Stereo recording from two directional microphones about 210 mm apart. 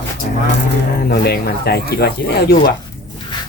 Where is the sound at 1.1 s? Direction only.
50° left (ahead or behind).